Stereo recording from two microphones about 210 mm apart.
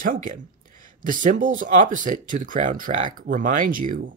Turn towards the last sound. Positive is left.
turn(degrees=-40)  # may be behind; listen again after turning